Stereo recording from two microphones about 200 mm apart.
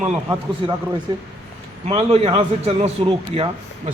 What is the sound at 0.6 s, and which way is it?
Speech, 25° right (ahead or behind).